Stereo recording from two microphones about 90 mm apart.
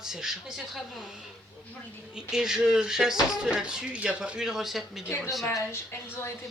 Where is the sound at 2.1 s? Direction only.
10° right (ahead or behind).